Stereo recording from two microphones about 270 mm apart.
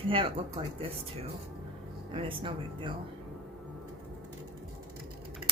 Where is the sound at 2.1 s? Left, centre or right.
Centre.